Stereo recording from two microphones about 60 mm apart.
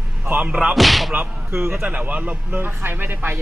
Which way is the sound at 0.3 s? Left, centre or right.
Right.